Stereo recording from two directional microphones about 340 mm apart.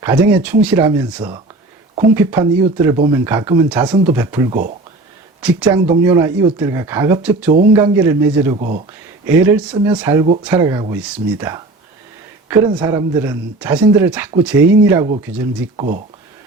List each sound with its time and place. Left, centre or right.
0.0 s speech: centre
8.5 s speech: right
9.2 s speech: centre
15.7 s speech: centre